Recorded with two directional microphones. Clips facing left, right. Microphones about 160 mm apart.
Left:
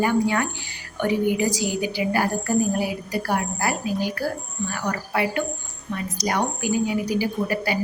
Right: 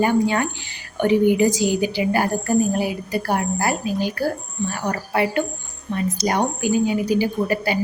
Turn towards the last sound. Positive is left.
turn(degrees=-25)  # may be behind; listen again after turning